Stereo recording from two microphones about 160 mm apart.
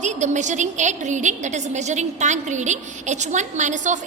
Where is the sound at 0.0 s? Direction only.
50° right (ahead or behind).